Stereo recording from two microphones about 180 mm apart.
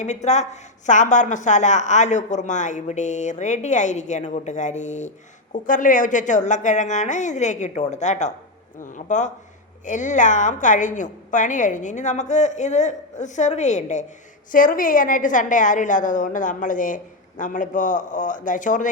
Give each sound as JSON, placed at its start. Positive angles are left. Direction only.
{"t": 0.0, "sound": "a woman's voice", "side_deg": 40}